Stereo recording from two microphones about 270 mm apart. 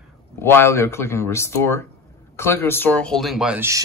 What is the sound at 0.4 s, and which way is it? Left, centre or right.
Speech, centre.